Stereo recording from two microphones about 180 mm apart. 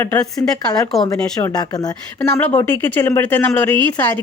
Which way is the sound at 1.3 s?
20° left (ahead or behind).